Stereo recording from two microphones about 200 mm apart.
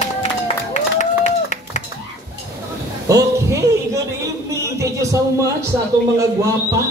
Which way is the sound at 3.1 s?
15° right (ahead or behind).